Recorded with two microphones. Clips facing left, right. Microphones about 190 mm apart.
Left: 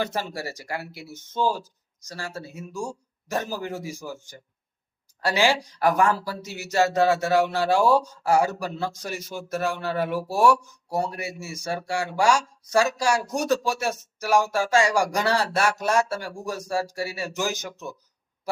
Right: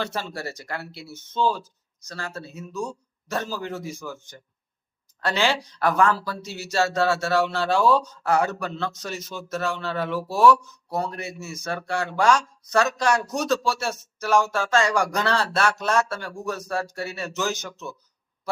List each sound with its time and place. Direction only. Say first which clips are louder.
0.0 s speech: left 1 dB; 15° left (ahead or behind)
5.2 s speech: left 2 dB; 10° left (ahead or behind)